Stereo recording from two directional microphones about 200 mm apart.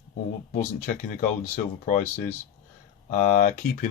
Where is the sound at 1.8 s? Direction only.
40° left (ahead or behind).